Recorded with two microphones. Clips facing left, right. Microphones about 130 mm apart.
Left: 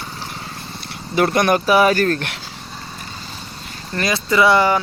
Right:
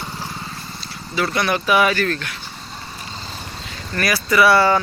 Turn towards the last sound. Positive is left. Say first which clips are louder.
# even
turn(degrees=15)  # may be behind; listen again after turning